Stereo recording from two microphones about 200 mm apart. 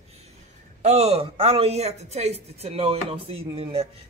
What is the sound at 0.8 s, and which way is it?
Speech, 30° right (ahead or behind).